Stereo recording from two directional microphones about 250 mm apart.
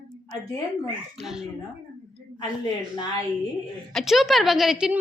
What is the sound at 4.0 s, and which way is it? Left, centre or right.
A woman's voice, centre.